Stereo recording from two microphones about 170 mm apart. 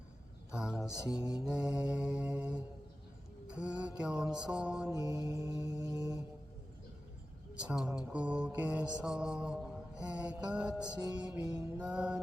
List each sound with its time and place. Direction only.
0.5 s music: centre (ahead or behind)
1.3 s mantra: 5° right (ahead or behind)
3.4 s music: 5° right (ahead or behind)
4.9 s music: 20° right (ahead or behind)
7.5 s music: 5° right (ahead or behind)
11.2 s mantra: 5° right (ahead or behind)